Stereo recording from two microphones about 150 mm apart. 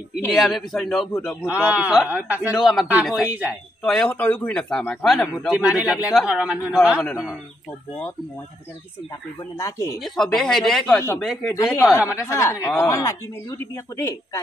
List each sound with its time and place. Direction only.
0.3 s a man's voice: centre (ahead or behind)
2.5 s a man's voice: centre (ahead or behind)
3.8 s a man's voice: 5° left (ahead or behind)
7.0 s a man's voice: 10° left (ahead or behind)
9.6 s speech: 20° left (ahead or behind)
9.9 s speech: centre (ahead or behind)
11.5 s speech: 20° left (ahead or behind)